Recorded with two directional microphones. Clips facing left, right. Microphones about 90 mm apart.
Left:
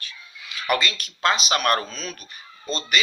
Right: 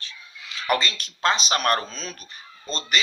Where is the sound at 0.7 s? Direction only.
35° right (ahead or behind).